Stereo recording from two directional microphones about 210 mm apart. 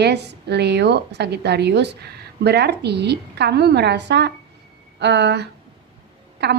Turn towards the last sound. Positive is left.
turn(degrees=-55)  # may be behind; listen again after turning